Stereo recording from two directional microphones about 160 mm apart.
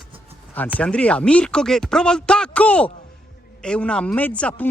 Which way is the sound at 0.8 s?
5° left (ahead or behind).